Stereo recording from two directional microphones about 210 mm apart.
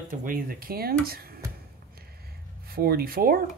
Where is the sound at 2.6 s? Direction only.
45° right (ahead or behind).